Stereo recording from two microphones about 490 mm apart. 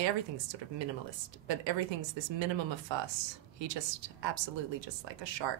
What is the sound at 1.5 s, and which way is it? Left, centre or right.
Speech, right.